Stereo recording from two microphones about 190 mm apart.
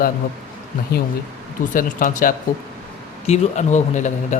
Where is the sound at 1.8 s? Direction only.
45° left (ahead or behind).